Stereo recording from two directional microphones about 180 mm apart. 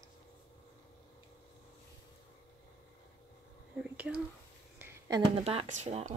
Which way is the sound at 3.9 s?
5° right (ahead or behind).